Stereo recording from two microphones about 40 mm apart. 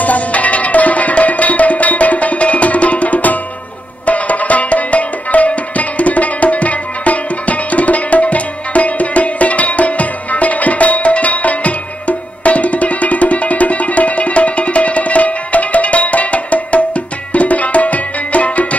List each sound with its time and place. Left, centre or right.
0.0 s music: left